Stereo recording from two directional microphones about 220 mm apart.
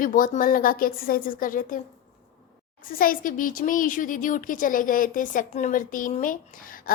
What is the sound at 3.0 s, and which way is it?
Speech, 40° left (ahead or behind).